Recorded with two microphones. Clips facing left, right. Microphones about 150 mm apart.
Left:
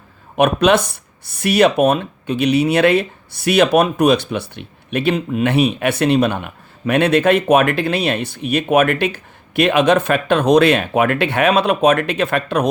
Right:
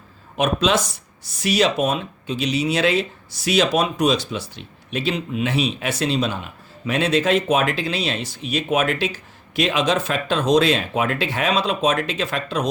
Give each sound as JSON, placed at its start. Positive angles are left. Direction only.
{"t": 0.3, "sound": "speech", "side_deg": 60}